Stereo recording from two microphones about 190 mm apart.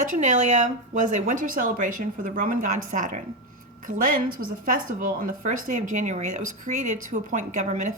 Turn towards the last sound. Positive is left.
turn(degrees=-40)  # may be behind; listen again after turning